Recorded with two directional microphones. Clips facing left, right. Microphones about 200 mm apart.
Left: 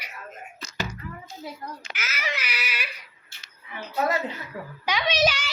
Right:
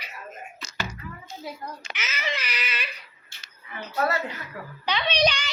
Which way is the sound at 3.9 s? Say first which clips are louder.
Left 1 dB; 20° left (ahead or behind).